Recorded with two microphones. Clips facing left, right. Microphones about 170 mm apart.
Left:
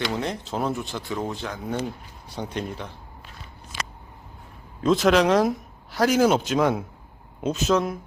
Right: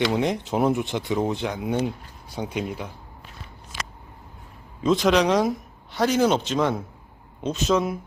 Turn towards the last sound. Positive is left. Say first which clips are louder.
# even
turn(degrees=0)  # may be behind; listen again after turning